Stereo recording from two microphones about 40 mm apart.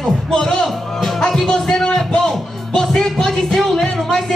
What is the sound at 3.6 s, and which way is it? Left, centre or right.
Speech, centre.